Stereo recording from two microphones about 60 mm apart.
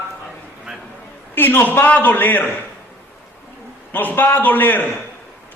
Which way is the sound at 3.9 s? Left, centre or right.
Left.